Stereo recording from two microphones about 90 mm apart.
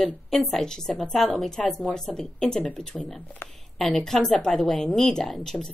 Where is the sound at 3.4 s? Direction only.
25° left (ahead or behind).